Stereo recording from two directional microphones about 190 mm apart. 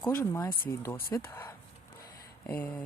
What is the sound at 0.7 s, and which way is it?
Speech, 15° left (ahead or behind).